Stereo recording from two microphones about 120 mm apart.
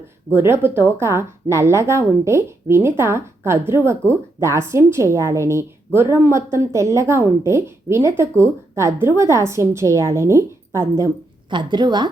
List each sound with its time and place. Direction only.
0.3 s a woman's voice: 20° right (ahead or behind)
11.5 s a woman's voice: 40° right (ahead or behind)